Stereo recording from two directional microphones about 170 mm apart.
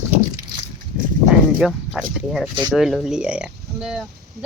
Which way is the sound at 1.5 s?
Centre (ahead or behind).